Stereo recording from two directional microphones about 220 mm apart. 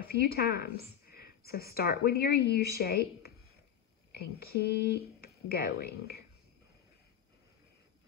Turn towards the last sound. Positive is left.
turn(degrees=45)  # may be behind; listen again after turning